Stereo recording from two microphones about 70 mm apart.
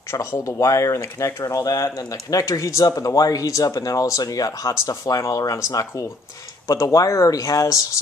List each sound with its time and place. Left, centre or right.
0.1 s speech: left
2.4 s speech: left